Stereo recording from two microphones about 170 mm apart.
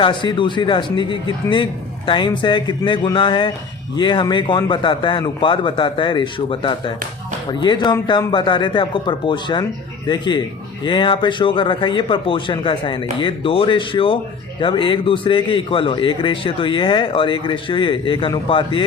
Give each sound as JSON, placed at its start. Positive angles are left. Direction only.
{"t": 0.0, "sound": "a man's voice", "side_deg": 30}